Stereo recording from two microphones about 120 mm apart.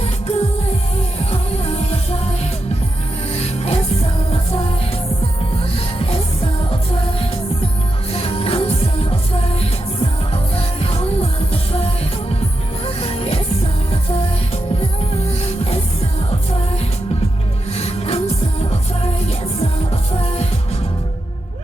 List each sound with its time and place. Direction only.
0.0 s music: 60° left (ahead or behind)
6.0 s music: 50° left (ahead or behind)
8.1 s music: 55° left (ahead or behind)
17.7 s music: 60° left (ahead or behind)
20.2 s music: 60° left (ahead or behind)